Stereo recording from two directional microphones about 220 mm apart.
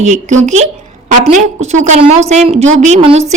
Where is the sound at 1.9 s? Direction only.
30° right (ahead or behind).